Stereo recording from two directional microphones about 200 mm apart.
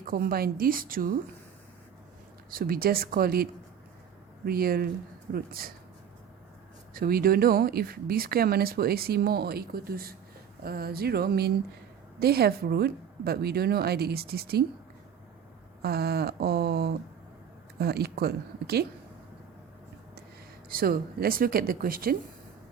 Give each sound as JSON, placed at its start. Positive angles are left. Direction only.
{"t": 0.0, "sound": "speech", "side_deg": -45}
{"t": 2.5, "sound": "speech", "side_deg": -45}
{"t": 6.9, "sound": "speech", "side_deg": -50}
{"t": 15.8, "sound": "speech", "side_deg": -50}
{"t": 20.7, "sound": "speech", "side_deg": -45}